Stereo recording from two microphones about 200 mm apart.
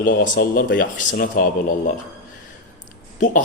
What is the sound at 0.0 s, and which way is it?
A man's voice, 45° left (ahead or behind).